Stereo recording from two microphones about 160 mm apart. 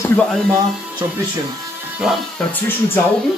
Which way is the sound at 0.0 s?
10° left (ahead or behind).